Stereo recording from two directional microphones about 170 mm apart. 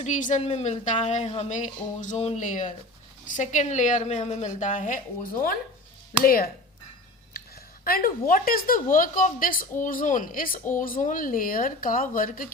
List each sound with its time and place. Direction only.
0.0 s a woman's voice: 50° left (ahead or behind)
7.9 s a woman's voice: 60° left (ahead or behind)